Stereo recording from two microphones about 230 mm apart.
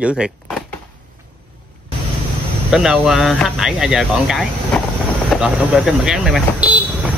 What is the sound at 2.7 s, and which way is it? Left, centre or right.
Speech, centre.